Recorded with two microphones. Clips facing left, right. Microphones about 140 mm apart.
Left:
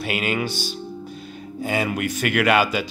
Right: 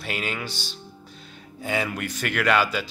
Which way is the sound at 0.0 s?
10° left (ahead or behind).